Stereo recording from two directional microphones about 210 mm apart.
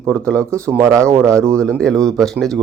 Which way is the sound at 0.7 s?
10° right (ahead or behind).